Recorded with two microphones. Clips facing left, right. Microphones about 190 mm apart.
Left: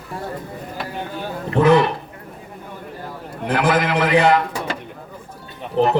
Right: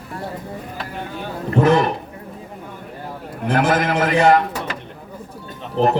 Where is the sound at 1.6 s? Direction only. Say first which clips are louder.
Left 1 dB; 45° right (ahead or behind).